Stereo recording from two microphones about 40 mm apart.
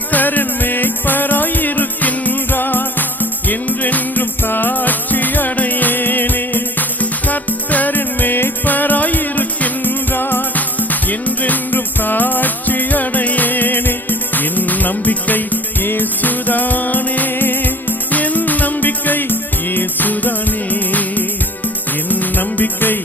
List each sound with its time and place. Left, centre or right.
0.1 s music: left
4.2 s music: left
8.6 s music: left
10.1 s music: left
10.5 s music: left
17.3 s music: left